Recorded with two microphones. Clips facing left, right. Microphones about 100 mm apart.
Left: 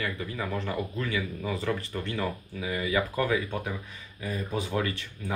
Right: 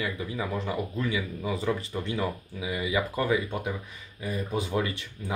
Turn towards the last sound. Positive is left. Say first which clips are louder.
# even
turn(degrees=-15)  # may be behind; listen again after turning